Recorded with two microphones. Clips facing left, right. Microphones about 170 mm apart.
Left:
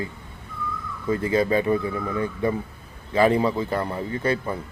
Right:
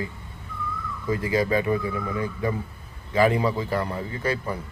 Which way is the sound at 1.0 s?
30° left (ahead or behind).